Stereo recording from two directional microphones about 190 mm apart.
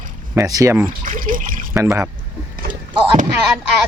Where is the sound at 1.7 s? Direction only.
15° right (ahead or behind).